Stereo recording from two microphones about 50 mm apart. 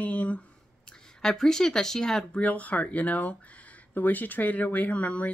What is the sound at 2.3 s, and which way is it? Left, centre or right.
Speech, left.